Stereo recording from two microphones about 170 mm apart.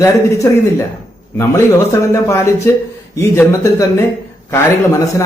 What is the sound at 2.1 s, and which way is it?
A man's voice, 15° left (ahead or behind).